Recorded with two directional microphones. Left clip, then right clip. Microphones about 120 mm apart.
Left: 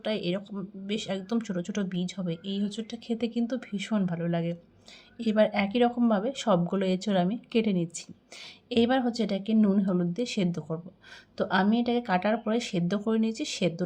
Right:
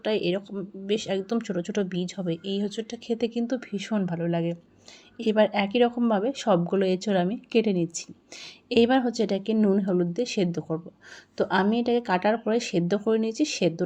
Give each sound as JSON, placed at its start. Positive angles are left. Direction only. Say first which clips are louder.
{"t": 0.0, "sound": "speech", "louder": "right 5 dB", "side_deg": -25}
{"t": 5.1, "sound": "speech", "louder": "right 3 dB", "side_deg": -25}